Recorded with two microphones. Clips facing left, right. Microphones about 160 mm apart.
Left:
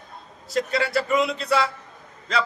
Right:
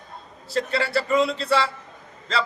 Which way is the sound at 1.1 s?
30° right (ahead or behind).